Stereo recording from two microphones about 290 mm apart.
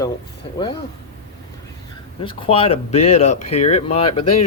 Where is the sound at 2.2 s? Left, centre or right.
Centre.